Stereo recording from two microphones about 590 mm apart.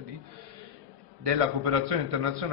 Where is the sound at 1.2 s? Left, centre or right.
Right.